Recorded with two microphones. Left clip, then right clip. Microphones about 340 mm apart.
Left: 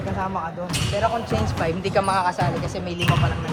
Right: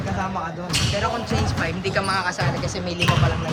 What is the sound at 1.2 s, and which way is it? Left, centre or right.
Speech, centre.